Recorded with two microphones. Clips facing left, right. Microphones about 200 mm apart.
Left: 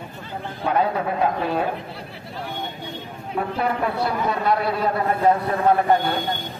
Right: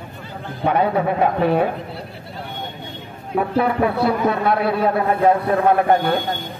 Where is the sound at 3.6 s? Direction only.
60° right (ahead or behind).